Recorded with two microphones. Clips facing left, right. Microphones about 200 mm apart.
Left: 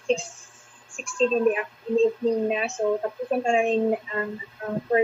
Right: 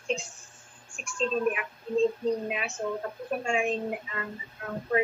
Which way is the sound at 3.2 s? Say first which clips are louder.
Left 6 dB; 30° left (ahead or behind).